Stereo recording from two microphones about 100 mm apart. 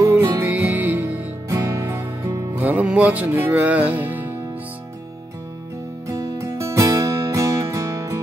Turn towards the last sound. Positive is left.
turn(degrees=-30)  # may be behind; listen again after turning